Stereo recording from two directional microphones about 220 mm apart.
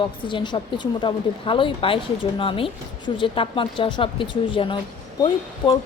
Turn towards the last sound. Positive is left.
turn(degrees=20)  # may be behind; listen again after turning